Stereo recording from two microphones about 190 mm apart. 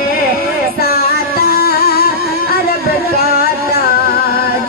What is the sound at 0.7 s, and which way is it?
Music, 55° left (ahead or behind).